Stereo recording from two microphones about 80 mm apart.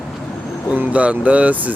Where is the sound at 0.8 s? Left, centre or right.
Centre.